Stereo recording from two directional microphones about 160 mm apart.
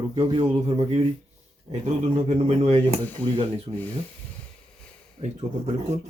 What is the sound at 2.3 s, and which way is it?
Speech, 40° right (ahead or behind).